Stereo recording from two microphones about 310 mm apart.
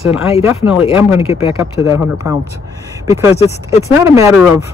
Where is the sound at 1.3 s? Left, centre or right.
Centre.